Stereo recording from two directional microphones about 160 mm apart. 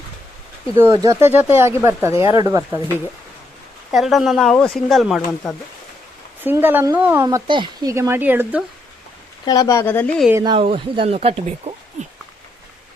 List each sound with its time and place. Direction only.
0.8 s speech: 20° right (ahead or behind)
3.9 s speech: centre (ahead or behind)
6.4 s speech: 10° right (ahead or behind)
7.3 s speech: 25° right (ahead or behind); by 8.6 s 10° right (ahead or behind)
9.5 s speech: 20° left (ahead or behind)
10.6 s speech: 35° right (ahead or behind)